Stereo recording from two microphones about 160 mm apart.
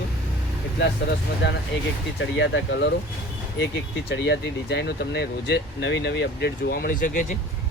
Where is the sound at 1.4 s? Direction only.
90° left.